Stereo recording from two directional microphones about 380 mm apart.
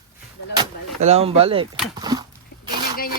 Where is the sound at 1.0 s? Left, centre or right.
Centre.